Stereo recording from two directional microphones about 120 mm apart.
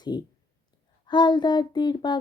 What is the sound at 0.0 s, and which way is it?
Speech, 35° left (ahead or behind).